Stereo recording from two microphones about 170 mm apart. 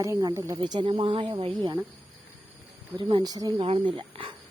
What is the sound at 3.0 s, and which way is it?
Speech, 30° right (ahead or behind).